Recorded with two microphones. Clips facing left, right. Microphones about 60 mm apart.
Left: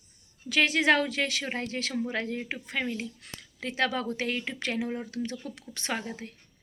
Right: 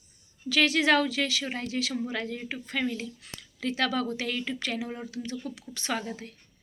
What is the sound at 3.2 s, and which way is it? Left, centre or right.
Speech, left.